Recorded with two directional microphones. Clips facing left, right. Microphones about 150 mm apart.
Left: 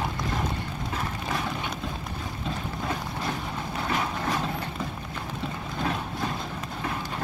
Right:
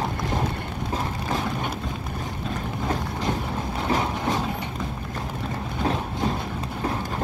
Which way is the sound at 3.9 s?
30° right (ahead or behind).